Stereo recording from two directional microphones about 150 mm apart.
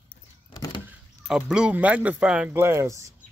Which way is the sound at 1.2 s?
5° right (ahead or behind).